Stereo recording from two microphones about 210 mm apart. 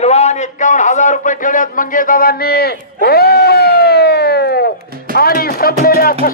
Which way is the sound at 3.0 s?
50° left (ahead or behind).